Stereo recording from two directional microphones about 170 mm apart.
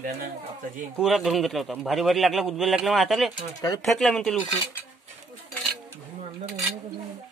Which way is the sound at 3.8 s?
5° left (ahead or behind).